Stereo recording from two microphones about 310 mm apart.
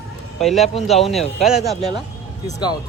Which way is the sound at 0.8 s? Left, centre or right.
Centre.